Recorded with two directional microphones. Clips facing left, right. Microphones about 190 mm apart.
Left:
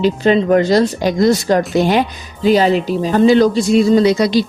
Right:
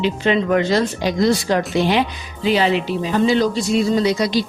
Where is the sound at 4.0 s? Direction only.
65° left (ahead or behind).